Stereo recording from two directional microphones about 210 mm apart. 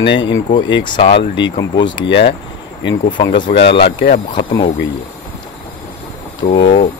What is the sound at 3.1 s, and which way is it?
Speech, 20° left (ahead or behind).